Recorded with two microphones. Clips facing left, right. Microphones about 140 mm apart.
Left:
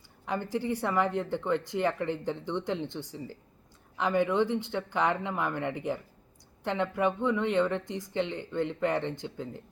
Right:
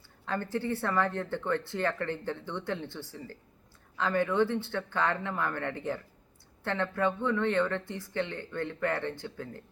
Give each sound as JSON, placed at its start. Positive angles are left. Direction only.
{"t": 0.3, "sound": "speech", "side_deg": 15}